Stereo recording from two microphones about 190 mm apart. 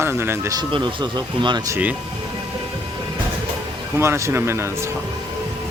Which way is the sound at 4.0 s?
15° right (ahead or behind).